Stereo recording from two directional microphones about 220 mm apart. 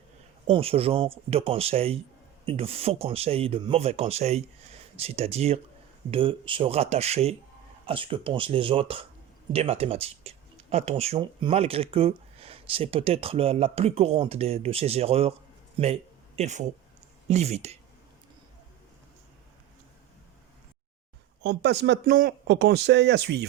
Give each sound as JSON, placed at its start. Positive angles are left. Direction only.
{"t": 0.4, "sound": "speech", "side_deg": -25}
{"t": 21.4, "sound": "speech", "side_deg": -50}